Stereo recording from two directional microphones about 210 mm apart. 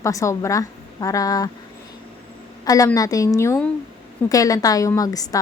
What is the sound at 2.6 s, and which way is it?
Speech, 15° left (ahead or behind).